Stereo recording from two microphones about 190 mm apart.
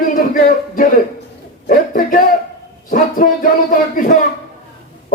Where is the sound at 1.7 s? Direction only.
45° left (ahead or behind).